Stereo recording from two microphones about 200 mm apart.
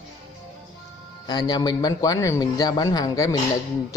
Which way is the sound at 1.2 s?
20° left (ahead or behind).